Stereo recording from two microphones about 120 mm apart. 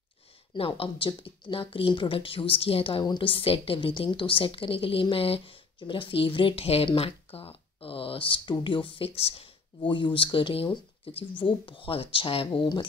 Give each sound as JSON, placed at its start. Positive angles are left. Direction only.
{"t": 0.6, "sound": "speech", "side_deg": 50}